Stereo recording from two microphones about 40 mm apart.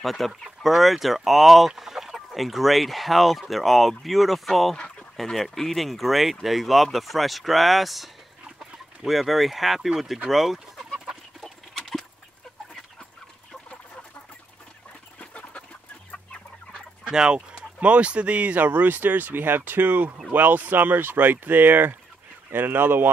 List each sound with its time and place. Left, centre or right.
0.0 s speech: centre
11.4 s chicken: centre
15.1 s chicken: left
17.1 s speech: centre
17.7 s speech: right